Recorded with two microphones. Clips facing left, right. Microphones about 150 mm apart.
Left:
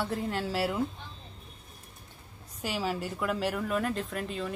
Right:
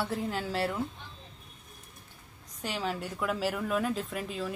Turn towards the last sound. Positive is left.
turn(degrees=0)  # may be behind; listen again after turning